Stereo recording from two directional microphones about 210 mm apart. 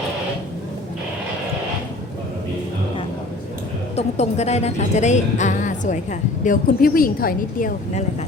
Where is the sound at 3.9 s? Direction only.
30° left (ahead or behind).